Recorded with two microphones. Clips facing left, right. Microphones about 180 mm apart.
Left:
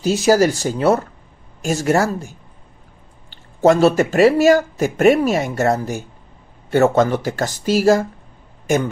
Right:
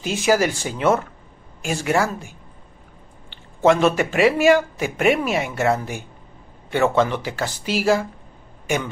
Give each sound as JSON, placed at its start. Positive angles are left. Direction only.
{"t": 0.0, "sound": "a man's voice", "side_deg": 40}